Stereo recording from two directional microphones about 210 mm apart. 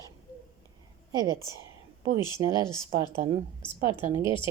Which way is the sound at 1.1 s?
15° right (ahead or behind).